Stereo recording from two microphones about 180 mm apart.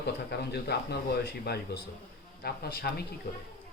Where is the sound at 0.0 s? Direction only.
65° left (ahead or behind).